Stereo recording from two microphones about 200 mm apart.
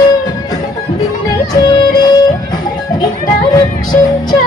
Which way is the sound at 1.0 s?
20° left (ahead or behind).